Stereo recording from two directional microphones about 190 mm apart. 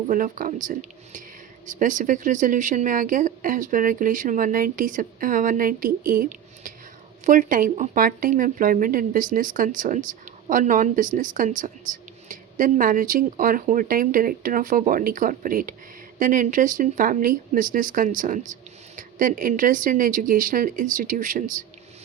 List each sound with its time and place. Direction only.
0.1 s speech: 45° right (ahead or behind)